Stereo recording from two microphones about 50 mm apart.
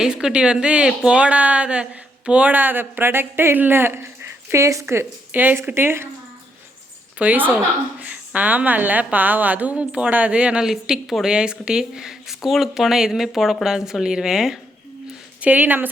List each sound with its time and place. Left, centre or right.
0.0 s speech: centre; by 5.0 s right
5.3 s speech: right
5.7 s speech: right
7.2 s a woman's voice: right
10.6 s speech: centre
15.4 s speech: right